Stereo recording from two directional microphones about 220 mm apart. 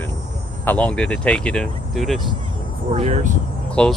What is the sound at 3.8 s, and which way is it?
Speech, 5° left (ahead or behind).